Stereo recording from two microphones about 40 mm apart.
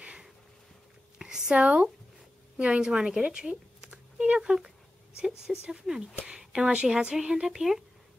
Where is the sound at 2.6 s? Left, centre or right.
Right.